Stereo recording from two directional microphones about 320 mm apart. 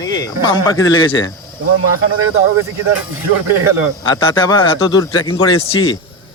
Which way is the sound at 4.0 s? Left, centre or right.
Centre.